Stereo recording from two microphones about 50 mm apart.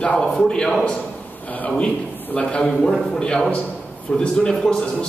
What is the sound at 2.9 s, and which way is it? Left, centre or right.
Speech, centre.